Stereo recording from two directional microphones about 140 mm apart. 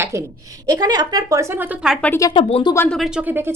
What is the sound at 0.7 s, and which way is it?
Speech, 30° right (ahead or behind).